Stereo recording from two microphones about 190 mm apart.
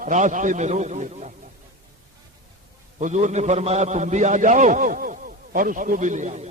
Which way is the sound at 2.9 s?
40° right (ahead or behind).